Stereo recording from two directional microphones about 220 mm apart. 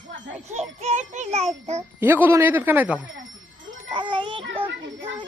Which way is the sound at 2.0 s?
10° right (ahead or behind).